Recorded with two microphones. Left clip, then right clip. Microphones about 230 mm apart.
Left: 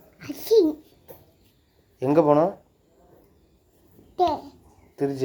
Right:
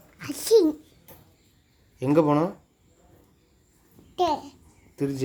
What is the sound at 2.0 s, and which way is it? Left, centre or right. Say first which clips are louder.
Speech: left 3 dB; right.